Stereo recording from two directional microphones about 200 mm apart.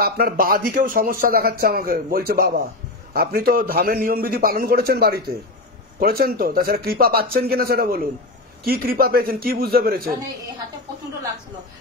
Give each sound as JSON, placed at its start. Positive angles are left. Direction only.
{"t": 0.0, "sound": "speech", "side_deg": -45}